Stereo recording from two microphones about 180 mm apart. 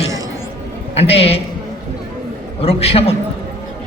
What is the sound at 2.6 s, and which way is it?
Speech, 35° left (ahead or behind).